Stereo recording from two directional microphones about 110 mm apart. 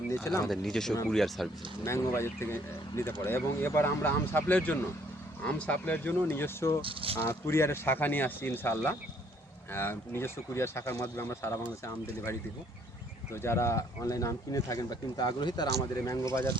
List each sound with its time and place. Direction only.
0.4 s speech: 5° left (ahead or behind)
1.8 s speech: 25° left (ahead or behind)
6.8 s speech: 55° right (ahead or behind)
7.3 s speech: 25° left (ahead or behind)
13.3 s speech: 25° left (ahead or behind); by 15.6 s 40° left (ahead or behind)
16.0 s speech: 30° left (ahead or behind)